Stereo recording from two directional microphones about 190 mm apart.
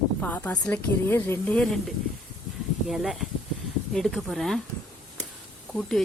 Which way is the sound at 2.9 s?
Centre (ahead or behind).